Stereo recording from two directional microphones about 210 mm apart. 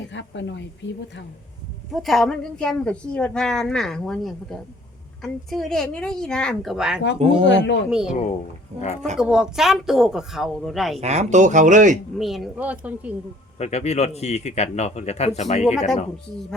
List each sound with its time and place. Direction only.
0.1 s speech: 60° left (ahead or behind)
1.9 s a woman's voice: centre (ahead or behind)
7.2 s speech: 25° right (ahead or behind)
7.4 s speech: 60° left (ahead or behind)
7.9 s a woman's voice: 5° right (ahead or behind)
8.7 s speech: 30° right (ahead or behind)
9.1 s a woman's voice: 5° right (ahead or behind)
11.0 s speech: 30° right (ahead or behind)
12.1 s speech: centre (ahead or behind)
13.6 s speech: 30° left (ahead or behind)